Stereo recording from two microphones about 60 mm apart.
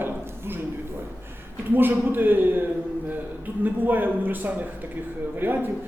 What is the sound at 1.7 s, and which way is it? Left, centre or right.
A man's voice, right.